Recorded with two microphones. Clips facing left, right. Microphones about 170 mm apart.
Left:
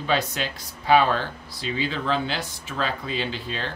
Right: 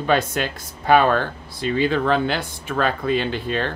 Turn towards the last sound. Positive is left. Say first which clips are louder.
# right 7 dB
turn(degrees=-55)  # may be behind; listen again after turning